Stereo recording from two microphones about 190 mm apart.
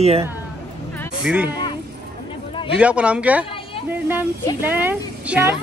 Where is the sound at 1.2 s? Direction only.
5° right (ahead or behind).